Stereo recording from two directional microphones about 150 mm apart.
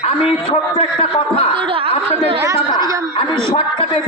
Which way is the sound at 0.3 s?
40° left (ahead or behind).